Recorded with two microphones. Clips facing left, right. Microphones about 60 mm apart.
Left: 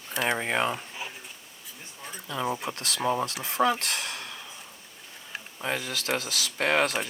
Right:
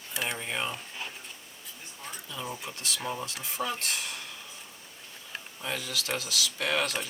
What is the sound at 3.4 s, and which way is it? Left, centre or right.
Speech, left.